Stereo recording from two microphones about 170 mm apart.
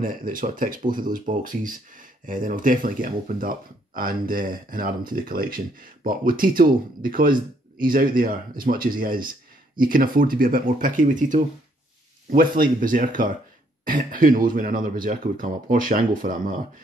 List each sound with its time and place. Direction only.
0.0 s speech: 55° right (ahead or behind)